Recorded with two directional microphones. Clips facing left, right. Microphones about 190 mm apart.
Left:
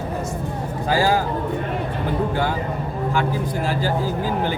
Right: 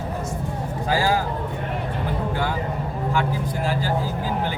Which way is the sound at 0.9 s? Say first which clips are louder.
Left 3 dB; 30° left (ahead or behind).